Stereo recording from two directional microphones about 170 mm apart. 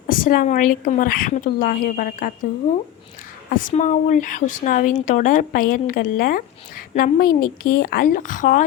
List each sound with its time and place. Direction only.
0.1 s speech: 55° left (ahead or behind)
3.5 s speech: 50° left (ahead or behind)